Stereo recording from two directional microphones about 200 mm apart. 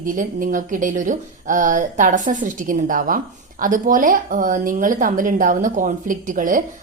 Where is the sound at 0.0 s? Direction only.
40° right (ahead or behind).